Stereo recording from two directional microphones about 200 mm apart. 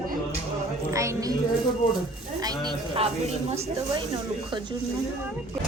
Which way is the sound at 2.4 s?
20° right (ahead or behind).